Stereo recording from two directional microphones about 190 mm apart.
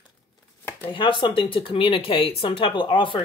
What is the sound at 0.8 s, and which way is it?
Speech, 25° left (ahead or behind).